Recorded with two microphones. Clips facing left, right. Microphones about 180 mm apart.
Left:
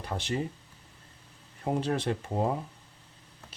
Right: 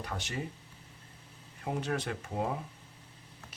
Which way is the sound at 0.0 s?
30° left (ahead or behind).